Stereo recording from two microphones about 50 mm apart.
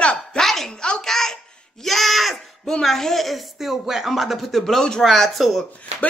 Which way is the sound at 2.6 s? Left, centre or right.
Centre.